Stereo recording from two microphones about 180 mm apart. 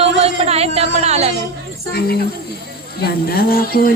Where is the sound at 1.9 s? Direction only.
60° left (ahead or behind).